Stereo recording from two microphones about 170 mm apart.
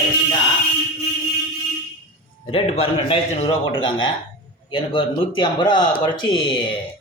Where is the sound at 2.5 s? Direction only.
35° left (ahead or behind).